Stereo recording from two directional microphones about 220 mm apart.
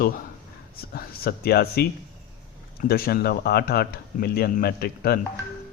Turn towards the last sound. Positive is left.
turn(degrees=45)  # may be behind; listen again after turning